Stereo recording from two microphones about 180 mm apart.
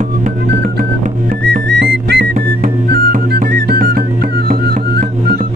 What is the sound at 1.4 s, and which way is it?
Music, 65° right (ahead or behind).